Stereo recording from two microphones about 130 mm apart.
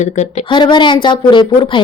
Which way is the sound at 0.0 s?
65° left (ahead or behind).